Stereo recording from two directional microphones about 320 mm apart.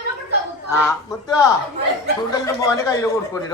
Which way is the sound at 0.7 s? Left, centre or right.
Centre.